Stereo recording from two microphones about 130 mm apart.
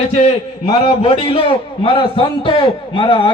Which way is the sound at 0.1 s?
60° left (ahead or behind).